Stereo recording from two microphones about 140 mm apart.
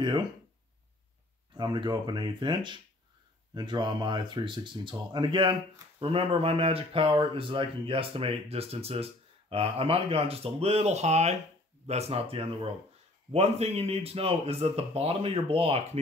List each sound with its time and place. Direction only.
1.5 s speech: 35° right (ahead or behind)